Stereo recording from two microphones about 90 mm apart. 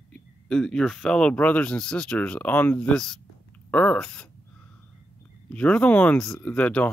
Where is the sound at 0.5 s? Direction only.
5° left (ahead or behind).